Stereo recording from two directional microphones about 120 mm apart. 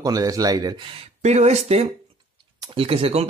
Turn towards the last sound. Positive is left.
turn(degrees=-55)  # may be behind; listen again after turning